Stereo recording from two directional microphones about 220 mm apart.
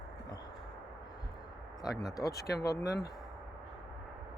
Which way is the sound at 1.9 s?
Centre (ahead or behind).